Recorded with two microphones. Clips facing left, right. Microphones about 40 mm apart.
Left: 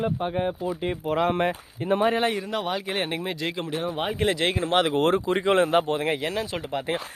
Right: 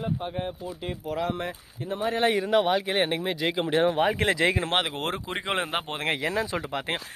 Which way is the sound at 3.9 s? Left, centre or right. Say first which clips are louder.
Right 3 dB; right.